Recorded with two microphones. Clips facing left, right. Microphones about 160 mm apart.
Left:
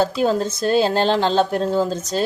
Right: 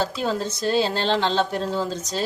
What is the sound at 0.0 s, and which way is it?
A woman's voice, 50° left (ahead or behind).